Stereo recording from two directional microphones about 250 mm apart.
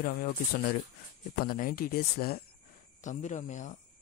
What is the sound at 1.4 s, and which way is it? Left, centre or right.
Speech, left.